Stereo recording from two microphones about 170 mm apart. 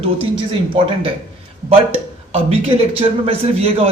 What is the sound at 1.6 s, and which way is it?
A man's voice, 35° right (ahead or behind).